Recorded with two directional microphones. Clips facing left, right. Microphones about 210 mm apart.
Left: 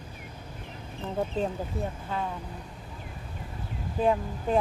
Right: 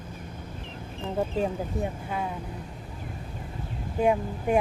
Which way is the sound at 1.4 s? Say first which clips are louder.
Right 2 dB; 10° right (ahead or behind).